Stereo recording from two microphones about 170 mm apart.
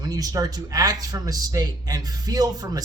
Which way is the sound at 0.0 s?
20° right (ahead or behind).